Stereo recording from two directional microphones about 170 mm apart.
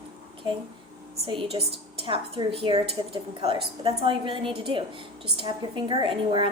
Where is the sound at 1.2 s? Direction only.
30° right (ahead or behind).